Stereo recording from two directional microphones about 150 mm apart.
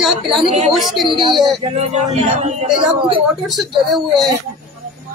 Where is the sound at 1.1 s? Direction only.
35° right (ahead or behind).